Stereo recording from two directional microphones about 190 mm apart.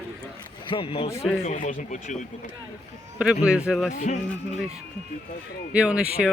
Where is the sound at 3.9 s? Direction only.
40° left (ahead or behind).